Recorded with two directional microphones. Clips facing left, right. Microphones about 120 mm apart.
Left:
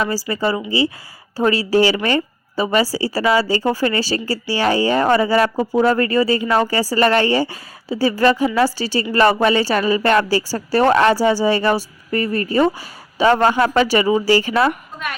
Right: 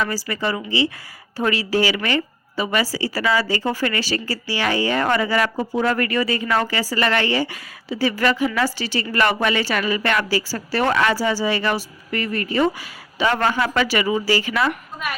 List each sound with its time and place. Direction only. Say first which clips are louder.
0.4 s speech: left 3 dB; 30° left (ahead or behind)
15.0 s a woman's voice: even; 5° right (ahead or behind)